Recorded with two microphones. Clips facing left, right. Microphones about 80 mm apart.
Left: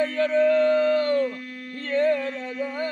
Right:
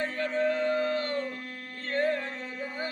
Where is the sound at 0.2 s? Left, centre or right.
Left.